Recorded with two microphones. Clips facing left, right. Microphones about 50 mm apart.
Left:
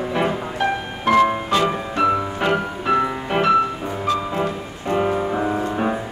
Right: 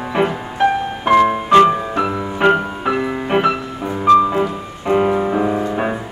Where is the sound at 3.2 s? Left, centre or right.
Right.